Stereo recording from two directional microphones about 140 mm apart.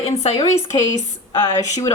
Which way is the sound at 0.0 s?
45° left (ahead or behind).